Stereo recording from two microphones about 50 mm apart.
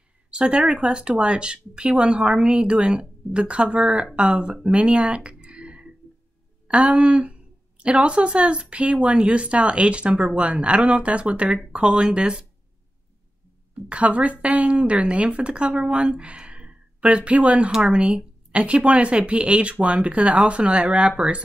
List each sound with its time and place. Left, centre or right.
0.3 s speech: right
4.6 s a sound: centre
6.7 s speech: right
13.7 s speech: right
17.6 s speech: centre